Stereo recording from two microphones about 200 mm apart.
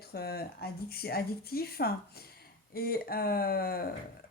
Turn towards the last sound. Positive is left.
turn(degrees=50)  # may be behind; listen again after turning